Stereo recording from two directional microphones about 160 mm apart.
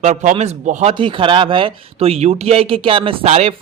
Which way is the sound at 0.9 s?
30° right (ahead or behind).